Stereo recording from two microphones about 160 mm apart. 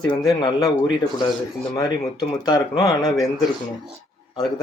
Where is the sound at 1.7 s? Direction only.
20° left (ahead or behind).